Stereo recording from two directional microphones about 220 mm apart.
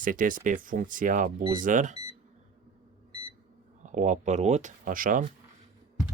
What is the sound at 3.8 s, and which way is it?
Speech, 35° right (ahead or behind).